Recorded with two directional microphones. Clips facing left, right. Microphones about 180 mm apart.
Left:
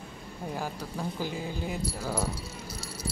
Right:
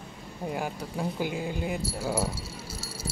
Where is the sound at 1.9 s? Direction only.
5° right (ahead or behind).